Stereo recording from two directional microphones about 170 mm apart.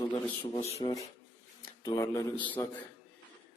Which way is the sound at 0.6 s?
35° left (ahead or behind).